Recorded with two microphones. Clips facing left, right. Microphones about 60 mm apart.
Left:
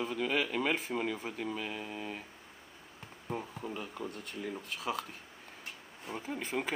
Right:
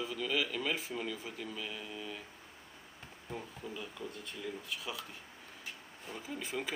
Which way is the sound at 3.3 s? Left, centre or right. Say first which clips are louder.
Left 5 dB; left.